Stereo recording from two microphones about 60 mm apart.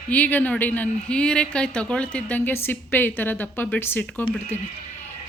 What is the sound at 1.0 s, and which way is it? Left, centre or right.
Speech, centre.